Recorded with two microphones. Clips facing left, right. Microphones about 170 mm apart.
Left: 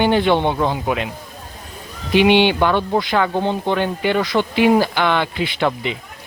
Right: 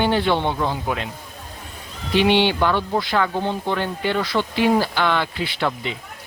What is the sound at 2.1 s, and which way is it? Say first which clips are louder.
Speech: left 4 dB; 15° left (ahead or behind).